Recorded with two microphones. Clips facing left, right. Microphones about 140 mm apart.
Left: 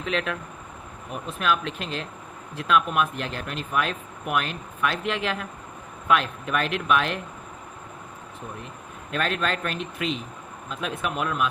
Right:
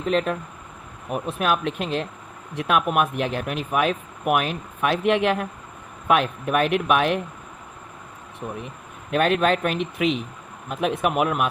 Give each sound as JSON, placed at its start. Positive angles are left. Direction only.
{"t": 0.0, "sound": "speech", "side_deg": -40}
{"t": 1.1, "sound": "speech", "side_deg": -50}
{"t": 9.1, "sound": "speech", "side_deg": -55}